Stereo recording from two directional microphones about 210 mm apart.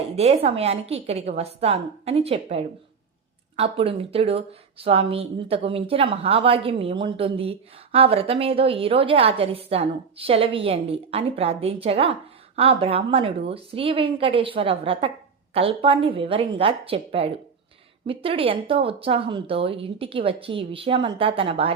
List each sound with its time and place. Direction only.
0.2 s a woman's voice: 30° right (ahead or behind)